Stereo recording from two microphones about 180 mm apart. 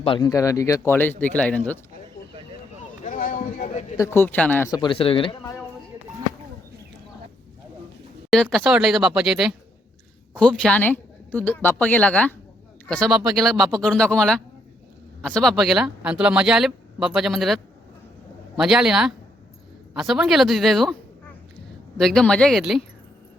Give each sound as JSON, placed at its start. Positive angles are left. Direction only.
{"t": 0.0, "sound": "speech", "side_deg": 30}
{"t": 0.3, "sound": "speech", "side_deg": 20}
{"t": 3.0, "sound": "a sound", "side_deg": 45}
{"t": 3.9, "sound": "speech", "side_deg": 15}
{"t": 4.7, "sound": "speech", "side_deg": 25}
{"t": 8.3, "sound": "speech", "side_deg": 0}
{"t": 21.9, "sound": "speech", "side_deg": 0}